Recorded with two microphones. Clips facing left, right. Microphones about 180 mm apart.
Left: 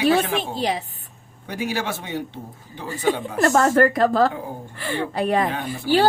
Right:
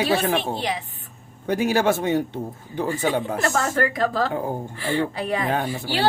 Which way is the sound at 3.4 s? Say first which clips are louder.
Left 6 dB; 45° left (ahead or behind).